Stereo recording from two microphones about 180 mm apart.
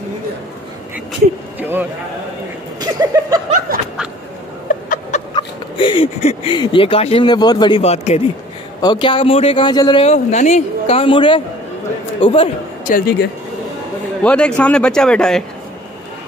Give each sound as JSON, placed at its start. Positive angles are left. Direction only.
{"t": 1.6, "sound": "a sound", "side_deg": -10}
{"t": 3.0, "sound": "speech", "side_deg": -20}
{"t": 3.5, "sound": "snicker", "side_deg": -55}
{"t": 4.8, "sound": "a sound", "side_deg": 45}
{"t": 5.3, "sound": "speech", "side_deg": 30}
{"t": 8.8, "sound": "speech", "side_deg": 25}
{"t": 10.0, "sound": "speech", "side_deg": 40}
{"t": 12.8, "sound": "speech", "side_deg": 55}
{"t": 14.2, "sound": "speech", "side_deg": 5}